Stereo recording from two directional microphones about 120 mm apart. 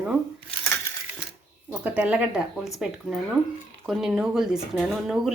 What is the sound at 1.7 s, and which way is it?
Speech, 10° right (ahead or behind).